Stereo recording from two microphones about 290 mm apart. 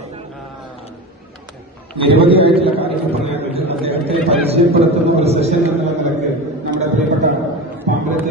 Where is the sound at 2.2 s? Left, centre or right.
Centre.